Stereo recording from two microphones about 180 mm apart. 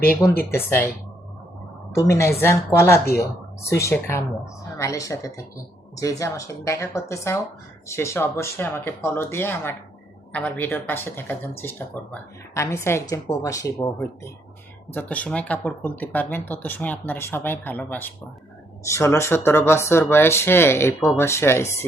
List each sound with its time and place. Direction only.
0.5 s speech: 15° left (ahead or behind)
2.0 s speech: 15° left (ahead or behind)